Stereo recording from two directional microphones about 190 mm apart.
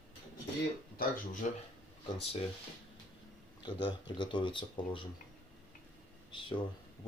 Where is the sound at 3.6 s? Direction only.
25° left (ahead or behind).